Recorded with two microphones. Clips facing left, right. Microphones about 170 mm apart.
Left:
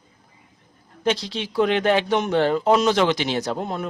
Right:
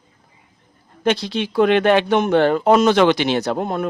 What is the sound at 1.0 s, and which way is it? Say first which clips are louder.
Speech: right 4 dB; 60° right (ahead or behind).